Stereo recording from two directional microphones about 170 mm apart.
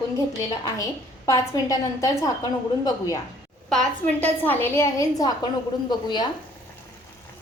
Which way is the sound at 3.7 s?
5° left (ahead or behind).